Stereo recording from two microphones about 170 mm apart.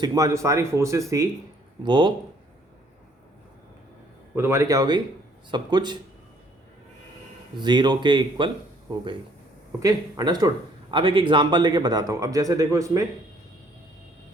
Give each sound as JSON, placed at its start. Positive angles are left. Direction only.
{"t": 0.0, "sound": "a man's voice", "side_deg": -20}
{"t": 4.4, "sound": "a man's voice", "side_deg": -15}
{"t": 7.6, "sound": "a man's voice", "side_deg": -25}
{"t": 9.8, "sound": "a man's voice", "side_deg": -25}